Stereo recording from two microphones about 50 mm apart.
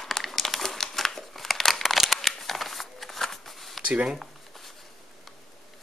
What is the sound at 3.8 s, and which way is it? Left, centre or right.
Speech, right.